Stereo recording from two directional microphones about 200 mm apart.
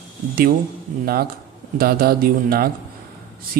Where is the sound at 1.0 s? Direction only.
50° right (ahead or behind).